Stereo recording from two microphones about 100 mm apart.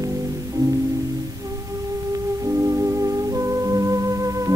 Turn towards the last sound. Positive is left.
turn(degrees=-35)  # may be behind; listen again after turning